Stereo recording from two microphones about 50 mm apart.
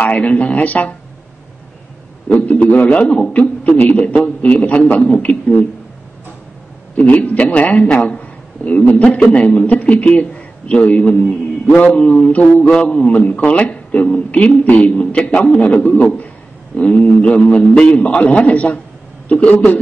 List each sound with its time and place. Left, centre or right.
0.0 s a man's voice: left
2.2 s a man's voice: left
7.0 s a man's voice: left
15.6 s a man's voice: left
19.5 s a man's voice: left